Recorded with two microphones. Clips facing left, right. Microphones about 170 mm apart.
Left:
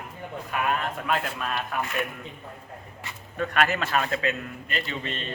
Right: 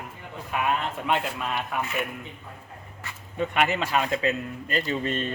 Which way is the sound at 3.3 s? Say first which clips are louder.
Even; 20° right (ahead or behind).